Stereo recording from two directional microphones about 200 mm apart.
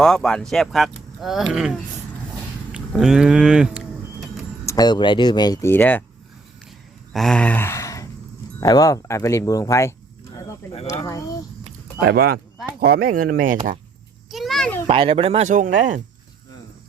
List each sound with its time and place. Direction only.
0.0 s speech: centre (ahead or behind)
2.9 s speech: centre (ahead or behind)
4.6 s speech: 15° left (ahead or behind)
7.1 s speech: centre (ahead or behind)
12.0 s speech: 50° right (ahead or behind)
14.3 s a sound: centre (ahead or behind)
14.8 s speech: 30° right (ahead or behind)